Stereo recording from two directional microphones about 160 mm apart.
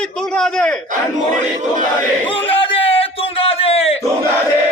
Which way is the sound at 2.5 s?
35° left (ahead or behind).